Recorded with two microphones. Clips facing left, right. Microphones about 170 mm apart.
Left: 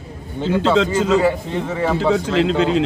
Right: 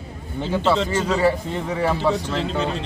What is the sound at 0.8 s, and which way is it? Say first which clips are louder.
Speech: left 6 dB; 90° left.